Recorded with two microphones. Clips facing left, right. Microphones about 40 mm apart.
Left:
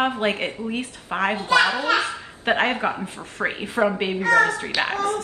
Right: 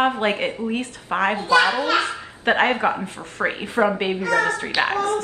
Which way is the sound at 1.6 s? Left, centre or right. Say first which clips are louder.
Right 2 dB; right.